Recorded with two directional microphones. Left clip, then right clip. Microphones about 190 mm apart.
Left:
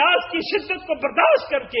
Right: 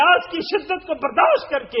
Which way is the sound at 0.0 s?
30° right (ahead or behind).